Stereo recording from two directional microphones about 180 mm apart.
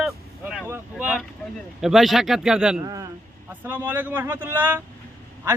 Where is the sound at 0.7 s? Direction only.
10° right (ahead or behind).